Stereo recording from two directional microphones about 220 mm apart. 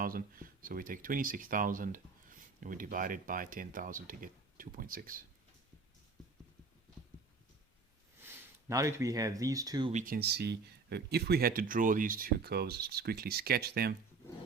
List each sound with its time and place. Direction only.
0.0 s speech: 40° right (ahead or behind)
8.2 s speech: 10° right (ahead or behind)
9.9 s speech: 40° right (ahead or behind)